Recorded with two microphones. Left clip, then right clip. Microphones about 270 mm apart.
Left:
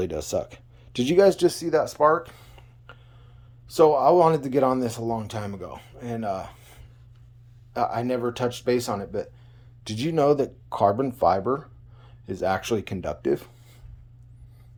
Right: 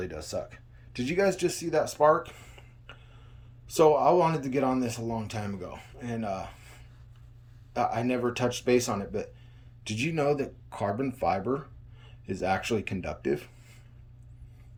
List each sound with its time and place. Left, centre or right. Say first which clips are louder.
0.0 s speech: left 8 dB; left